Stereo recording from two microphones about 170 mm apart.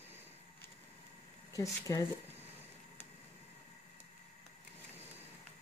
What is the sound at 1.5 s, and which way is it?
Speech, 20° left (ahead or behind).